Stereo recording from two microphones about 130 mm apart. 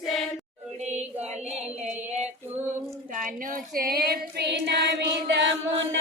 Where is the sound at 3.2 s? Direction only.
90° right.